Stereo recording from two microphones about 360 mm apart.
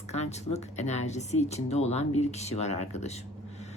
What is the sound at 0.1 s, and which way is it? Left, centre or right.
Speech, centre.